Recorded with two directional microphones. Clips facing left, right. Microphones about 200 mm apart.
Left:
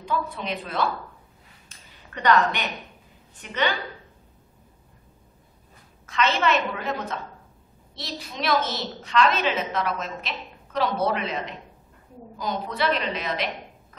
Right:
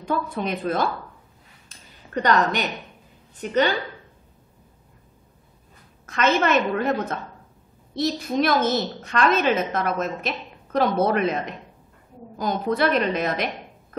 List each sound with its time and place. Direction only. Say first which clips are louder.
0.0 s a woman's voice: right 3 dB; 50° right (ahead or behind)
2.1 s a woman's voice: right 1 dB; 40° right (ahead or behind)
6.0 s a woman's voice: right 3 dB; 45° right (ahead or behind)